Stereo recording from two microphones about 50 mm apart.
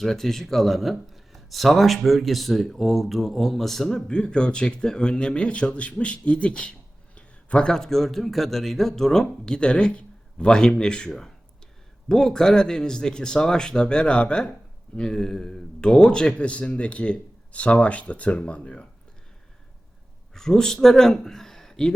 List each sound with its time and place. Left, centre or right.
0.0 s speech: centre
4.1 s a man's voice: centre
20.3 s speech: centre